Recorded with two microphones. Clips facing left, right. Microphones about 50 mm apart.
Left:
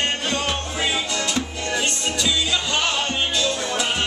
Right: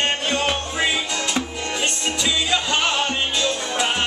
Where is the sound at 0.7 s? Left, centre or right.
Centre.